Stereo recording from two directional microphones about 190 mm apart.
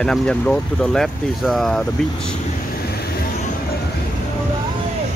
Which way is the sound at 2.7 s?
55° left (ahead or behind).